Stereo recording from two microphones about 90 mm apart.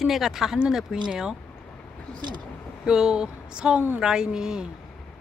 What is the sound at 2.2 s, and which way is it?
Speech, 55° right (ahead or behind).